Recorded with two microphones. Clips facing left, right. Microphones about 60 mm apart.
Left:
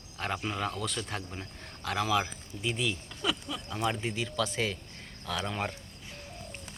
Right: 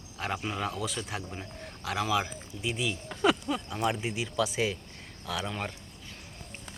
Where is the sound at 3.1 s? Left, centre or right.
Right.